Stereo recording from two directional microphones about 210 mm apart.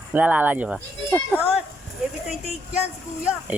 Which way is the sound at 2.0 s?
Centre (ahead or behind).